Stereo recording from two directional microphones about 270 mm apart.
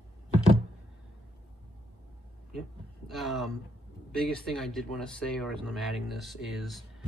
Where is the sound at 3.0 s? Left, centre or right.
Centre.